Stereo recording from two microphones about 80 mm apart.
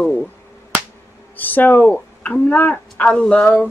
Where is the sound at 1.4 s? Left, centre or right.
Left.